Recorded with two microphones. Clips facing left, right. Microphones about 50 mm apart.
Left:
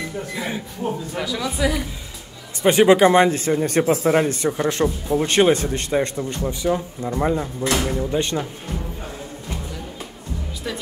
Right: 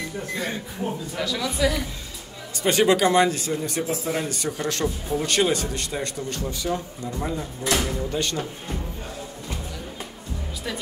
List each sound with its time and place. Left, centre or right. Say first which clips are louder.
0.3 s speech: left 1 dB; centre
2.6 s speech: left 6 dB; left